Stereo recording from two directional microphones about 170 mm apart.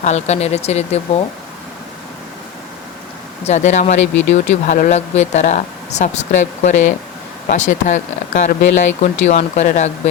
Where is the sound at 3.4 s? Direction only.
45° left (ahead or behind).